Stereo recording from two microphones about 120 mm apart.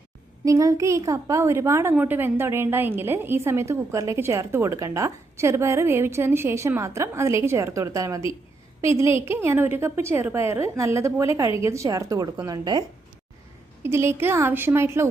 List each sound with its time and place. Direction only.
0.4 s a woman's voice: 30° right (ahead or behind)
13.8 s a woman's voice: 20° right (ahead or behind)